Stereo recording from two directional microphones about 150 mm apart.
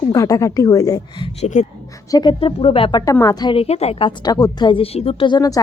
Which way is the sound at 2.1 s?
30° left (ahead or behind).